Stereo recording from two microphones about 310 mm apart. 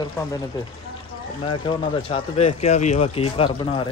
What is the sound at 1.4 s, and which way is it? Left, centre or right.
Speech, centre.